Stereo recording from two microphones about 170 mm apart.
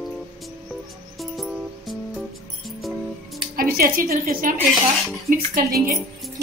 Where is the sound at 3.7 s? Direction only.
55° right (ahead or behind).